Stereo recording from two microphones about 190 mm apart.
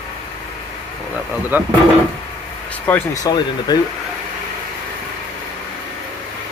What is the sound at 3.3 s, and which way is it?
Speech, 20° left (ahead or behind).